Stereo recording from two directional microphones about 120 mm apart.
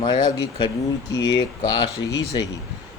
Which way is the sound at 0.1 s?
35° left (ahead or behind).